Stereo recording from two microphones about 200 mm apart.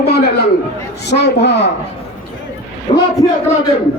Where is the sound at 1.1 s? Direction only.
60° left (ahead or behind).